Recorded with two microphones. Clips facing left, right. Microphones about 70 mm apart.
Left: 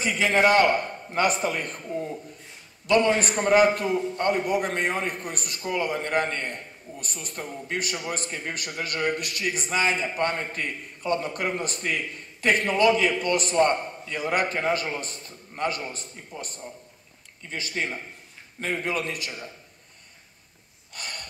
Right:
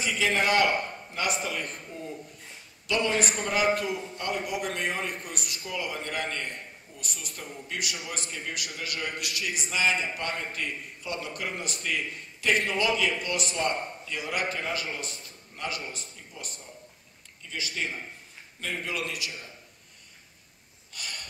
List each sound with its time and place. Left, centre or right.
0.0 s a man's voice: left
2.9 s a man's voice: left
20.9 s gasp: left